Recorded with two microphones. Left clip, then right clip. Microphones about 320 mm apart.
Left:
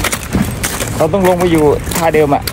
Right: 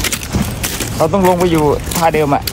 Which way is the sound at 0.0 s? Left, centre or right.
Centre.